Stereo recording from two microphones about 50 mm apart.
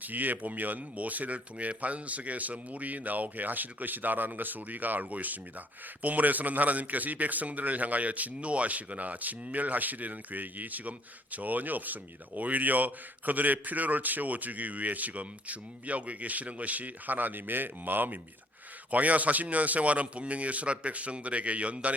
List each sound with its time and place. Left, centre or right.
0.0 s speech: right
18.9 s a man's voice: right